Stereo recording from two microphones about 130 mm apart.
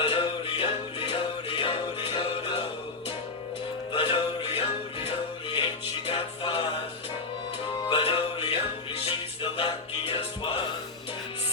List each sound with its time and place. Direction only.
0.0 s music: 45° left (ahead or behind)
3.9 s music: 40° left (ahead or behind)
7.9 s music: 45° left (ahead or behind)